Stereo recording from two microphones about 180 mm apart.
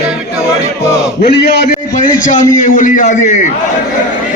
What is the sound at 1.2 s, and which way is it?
Speech, 70° left (ahead or behind).